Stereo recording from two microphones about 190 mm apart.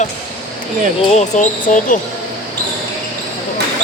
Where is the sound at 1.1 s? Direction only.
40° left (ahead or behind).